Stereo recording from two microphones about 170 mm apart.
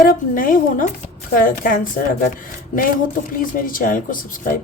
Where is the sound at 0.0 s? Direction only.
55° left (ahead or behind).